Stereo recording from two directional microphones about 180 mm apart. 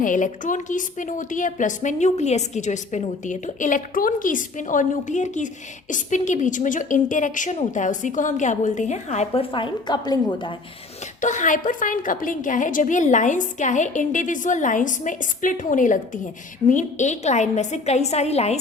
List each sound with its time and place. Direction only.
0.0 s a woman's voice: 45° left (ahead or behind); by 10.5 s 25° left (ahead or behind)
11.2 s a woman's voice: 45° left (ahead or behind)